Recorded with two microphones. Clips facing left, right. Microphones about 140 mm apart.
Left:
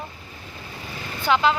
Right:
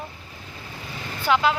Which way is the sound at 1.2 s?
5° right (ahead or behind).